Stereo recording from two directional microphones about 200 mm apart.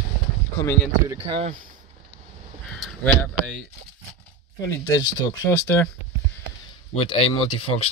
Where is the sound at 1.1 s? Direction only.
25° right (ahead or behind).